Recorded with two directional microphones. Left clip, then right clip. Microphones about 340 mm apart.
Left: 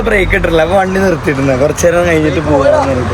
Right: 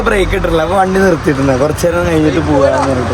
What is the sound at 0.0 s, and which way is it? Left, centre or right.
Speech, centre.